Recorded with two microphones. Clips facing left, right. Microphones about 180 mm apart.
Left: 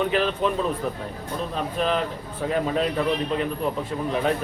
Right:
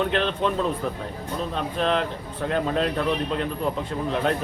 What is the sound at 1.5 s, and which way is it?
A man's voice, 5° left (ahead or behind).